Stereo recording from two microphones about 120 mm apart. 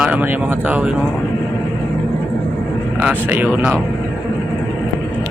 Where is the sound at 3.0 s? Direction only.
10° right (ahead or behind).